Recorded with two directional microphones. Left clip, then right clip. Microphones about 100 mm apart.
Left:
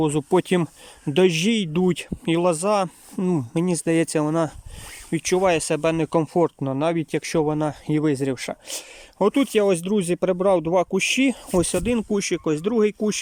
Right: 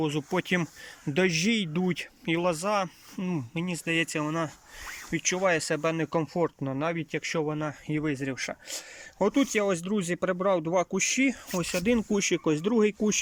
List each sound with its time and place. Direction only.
0.0 s speech: 40° left (ahead or behind); by 11.3 s 25° left (ahead or behind)
11.5 s speech: 55° left (ahead or behind)
11.9 s speech: 20° left (ahead or behind)
12.1 s speech: 5° left (ahead or behind)